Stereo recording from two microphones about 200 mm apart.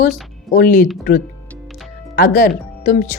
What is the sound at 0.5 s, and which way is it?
Speech, 45° left (ahead or behind).